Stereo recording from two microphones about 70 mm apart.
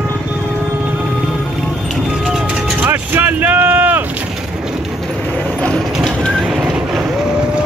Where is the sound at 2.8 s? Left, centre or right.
Right.